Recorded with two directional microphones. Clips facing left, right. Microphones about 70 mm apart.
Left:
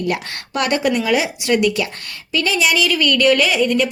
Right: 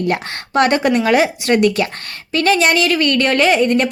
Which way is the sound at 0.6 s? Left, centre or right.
Right.